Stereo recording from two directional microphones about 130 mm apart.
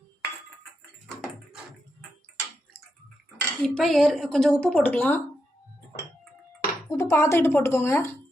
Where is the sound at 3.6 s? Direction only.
5° left (ahead or behind).